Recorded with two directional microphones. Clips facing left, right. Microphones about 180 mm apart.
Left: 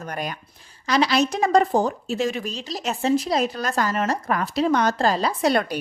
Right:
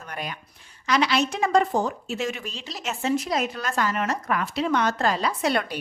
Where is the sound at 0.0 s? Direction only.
40° left (ahead or behind).